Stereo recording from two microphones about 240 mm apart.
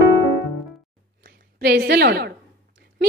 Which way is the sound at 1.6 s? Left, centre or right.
Right.